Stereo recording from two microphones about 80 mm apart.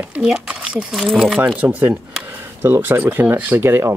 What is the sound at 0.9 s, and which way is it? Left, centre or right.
Speech, centre.